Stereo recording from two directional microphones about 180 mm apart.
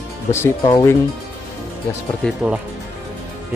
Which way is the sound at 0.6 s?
20° left (ahead or behind).